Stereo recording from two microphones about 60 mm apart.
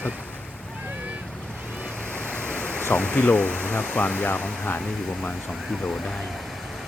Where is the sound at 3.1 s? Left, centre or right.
Left.